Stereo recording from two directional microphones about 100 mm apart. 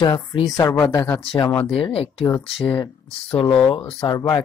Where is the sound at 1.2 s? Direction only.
65° left (ahead or behind).